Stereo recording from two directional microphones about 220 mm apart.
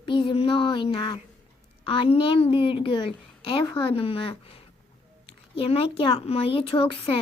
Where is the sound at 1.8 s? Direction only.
25° left (ahead or behind).